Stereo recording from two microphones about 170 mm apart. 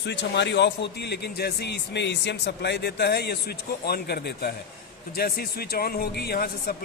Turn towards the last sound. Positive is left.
turn(degrees=65)  # may be behind; listen again after turning